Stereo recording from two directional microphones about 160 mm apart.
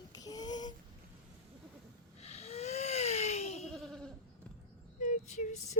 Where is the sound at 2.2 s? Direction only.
40° left (ahead or behind).